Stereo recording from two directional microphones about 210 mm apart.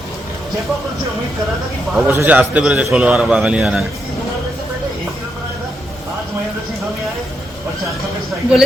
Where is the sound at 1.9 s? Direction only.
10° right (ahead or behind).